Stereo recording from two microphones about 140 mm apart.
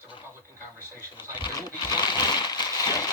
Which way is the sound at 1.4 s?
30° left (ahead or behind).